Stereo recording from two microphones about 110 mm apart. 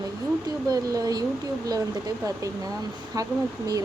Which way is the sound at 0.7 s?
35° right (ahead or behind).